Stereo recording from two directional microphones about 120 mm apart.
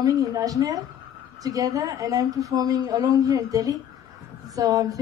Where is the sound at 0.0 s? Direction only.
30° right (ahead or behind).